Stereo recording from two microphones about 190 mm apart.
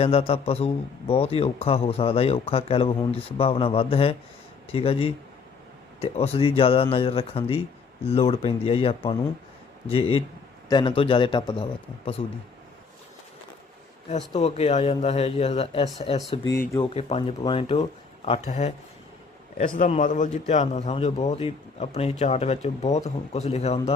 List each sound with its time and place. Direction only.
0.0 s a man's voice: 30° left (ahead or behind)
14.1 s a man's voice: 35° left (ahead or behind)
16.5 s a man's voice: 20° left (ahead or behind)
16.9 s a man's voice: 30° left (ahead or behind)